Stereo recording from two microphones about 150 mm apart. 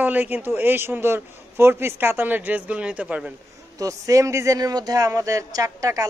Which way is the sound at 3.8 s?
20° right (ahead or behind).